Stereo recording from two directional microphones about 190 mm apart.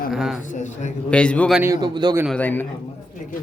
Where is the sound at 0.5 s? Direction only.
40° left (ahead or behind).